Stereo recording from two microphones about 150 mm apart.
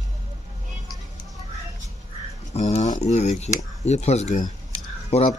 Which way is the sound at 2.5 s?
50° left (ahead or behind).